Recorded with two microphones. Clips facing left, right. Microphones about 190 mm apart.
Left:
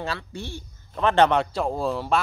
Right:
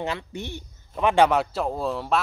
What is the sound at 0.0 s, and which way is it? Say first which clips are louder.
A woman's voice: right 2 dB; 20° right (ahead or behind).